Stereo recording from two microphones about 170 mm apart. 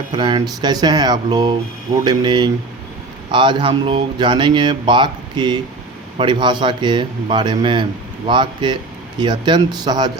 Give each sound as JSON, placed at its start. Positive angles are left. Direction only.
{"t": 0.2, "sound": "speech", "side_deg": -25}